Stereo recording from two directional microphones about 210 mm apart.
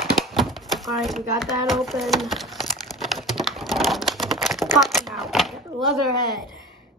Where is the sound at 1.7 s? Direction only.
Centre (ahead or behind).